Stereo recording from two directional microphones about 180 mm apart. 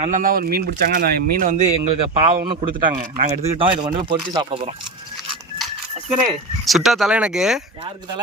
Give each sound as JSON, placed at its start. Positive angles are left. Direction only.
{"t": 0.0, "sound": "a man's voice", "side_deg": -50}
{"t": 2.9, "sound": "speech", "side_deg": -45}
{"t": 5.1, "sound": "a sound", "side_deg": 0}
{"t": 6.7, "sound": "speech", "side_deg": 0}